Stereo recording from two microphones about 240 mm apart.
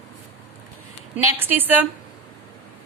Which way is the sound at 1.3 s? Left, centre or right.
Centre.